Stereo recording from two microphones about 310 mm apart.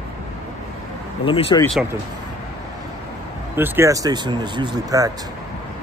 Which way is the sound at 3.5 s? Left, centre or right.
Centre.